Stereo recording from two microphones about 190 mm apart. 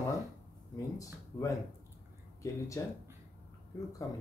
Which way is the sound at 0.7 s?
15° left (ahead or behind).